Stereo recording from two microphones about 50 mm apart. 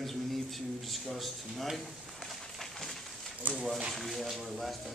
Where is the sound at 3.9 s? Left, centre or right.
Centre.